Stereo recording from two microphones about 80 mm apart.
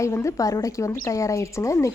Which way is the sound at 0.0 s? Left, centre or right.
Left.